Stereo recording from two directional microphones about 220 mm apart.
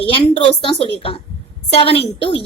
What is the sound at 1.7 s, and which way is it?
Speech, 25° left (ahead or behind).